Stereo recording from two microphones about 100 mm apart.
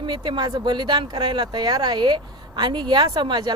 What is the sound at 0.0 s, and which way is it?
Speech, 55° right (ahead or behind).